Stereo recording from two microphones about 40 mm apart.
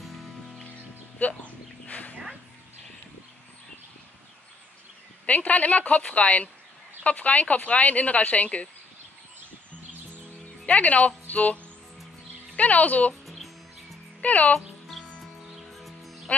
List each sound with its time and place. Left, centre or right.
0.0 s music: centre
1.2 s a sound: left
5.2 s speech: left
10.8 s speech: left
11.2 s music: left
12.5 s speech: left
13.1 s music: centre
14.2 s speech: left
15.6 s music: centre